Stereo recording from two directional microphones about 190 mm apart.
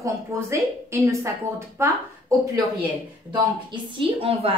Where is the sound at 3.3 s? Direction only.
25° right (ahead or behind).